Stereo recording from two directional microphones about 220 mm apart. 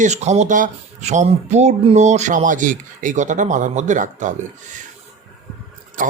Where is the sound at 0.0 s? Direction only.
30° right (ahead or behind).